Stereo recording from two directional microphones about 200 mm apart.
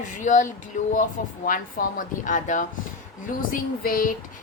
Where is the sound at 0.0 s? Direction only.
40° left (ahead or behind).